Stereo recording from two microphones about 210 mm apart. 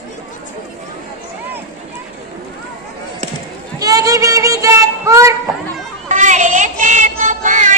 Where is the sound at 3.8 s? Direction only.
15° right (ahead or behind).